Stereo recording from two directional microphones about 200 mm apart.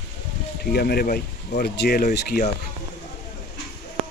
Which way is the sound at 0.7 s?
50° left (ahead or behind).